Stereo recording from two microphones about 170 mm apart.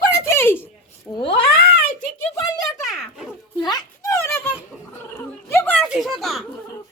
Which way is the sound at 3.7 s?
20° left (ahead or behind).